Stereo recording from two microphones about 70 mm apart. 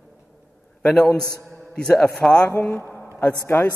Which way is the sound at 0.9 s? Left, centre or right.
Centre.